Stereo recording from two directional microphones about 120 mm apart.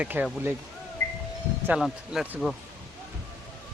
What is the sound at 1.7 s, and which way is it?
Speech, 5° right (ahead or behind).